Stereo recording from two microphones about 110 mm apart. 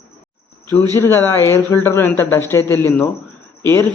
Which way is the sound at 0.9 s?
25° left (ahead or behind).